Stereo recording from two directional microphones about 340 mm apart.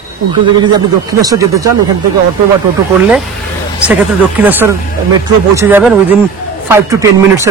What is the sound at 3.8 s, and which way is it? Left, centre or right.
A man's voice, centre.